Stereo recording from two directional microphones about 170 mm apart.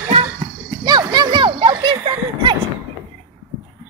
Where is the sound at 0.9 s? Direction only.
25° right (ahead or behind).